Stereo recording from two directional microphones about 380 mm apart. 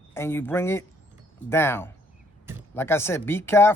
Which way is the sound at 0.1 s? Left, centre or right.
Centre.